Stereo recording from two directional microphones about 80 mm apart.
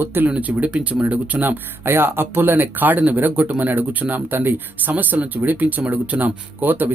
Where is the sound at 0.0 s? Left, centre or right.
Right.